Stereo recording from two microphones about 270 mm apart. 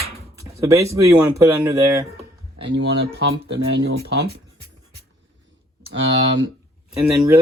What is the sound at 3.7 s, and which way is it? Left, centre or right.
Speech, right.